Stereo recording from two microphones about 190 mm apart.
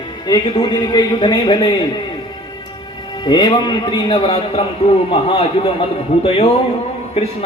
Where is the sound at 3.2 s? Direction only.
25° left (ahead or behind).